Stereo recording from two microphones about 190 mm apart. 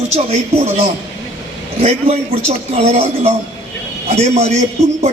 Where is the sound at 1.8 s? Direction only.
35° right (ahead or behind).